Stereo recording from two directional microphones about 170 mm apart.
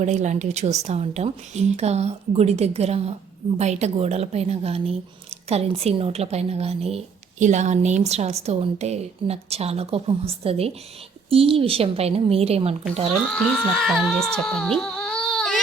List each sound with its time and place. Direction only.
0.0 s a woman's voice: 45° right (ahead or behind)
13.2 s speech: 5° left (ahead or behind)